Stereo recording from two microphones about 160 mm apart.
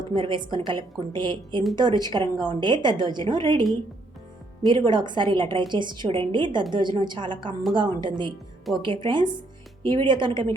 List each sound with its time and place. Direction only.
0.0 s a woman's voice: 30° right (ahead or behind)
4.7 s a woman's voice: 30° right (ahead or behind)